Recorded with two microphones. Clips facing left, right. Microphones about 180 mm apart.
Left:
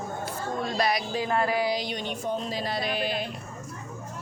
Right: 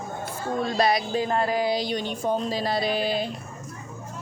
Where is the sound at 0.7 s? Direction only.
25° right (ahead or behind).